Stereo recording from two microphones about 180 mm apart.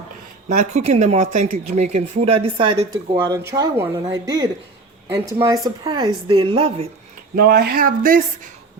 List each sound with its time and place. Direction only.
0.4 s speech: 40° right (ahead or behind)
7.3 s speech: 60° right (ahead or behind)